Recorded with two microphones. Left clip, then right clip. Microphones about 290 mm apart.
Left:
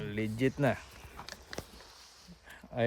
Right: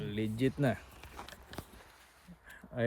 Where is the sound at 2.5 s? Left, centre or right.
Left.